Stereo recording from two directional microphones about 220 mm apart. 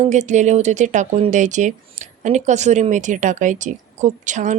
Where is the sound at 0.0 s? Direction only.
30° right (ahead or behind).